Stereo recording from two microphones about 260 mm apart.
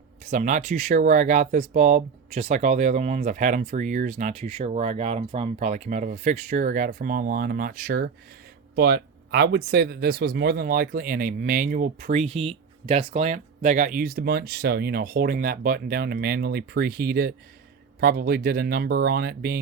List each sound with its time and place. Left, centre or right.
0.3 s speech: right